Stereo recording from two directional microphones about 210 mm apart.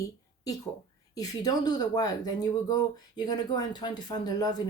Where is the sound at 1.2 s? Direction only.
20° left (ahead or behind).